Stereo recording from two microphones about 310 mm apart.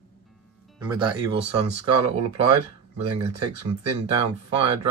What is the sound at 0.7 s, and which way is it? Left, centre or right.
Speech, centre.